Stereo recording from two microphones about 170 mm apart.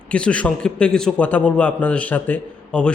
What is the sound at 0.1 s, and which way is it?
A man's voice, 5° left (ahead or behind).